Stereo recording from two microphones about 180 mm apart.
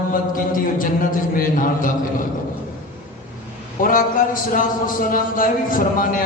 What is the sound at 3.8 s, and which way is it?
Speech, 50° left (ahead or behind).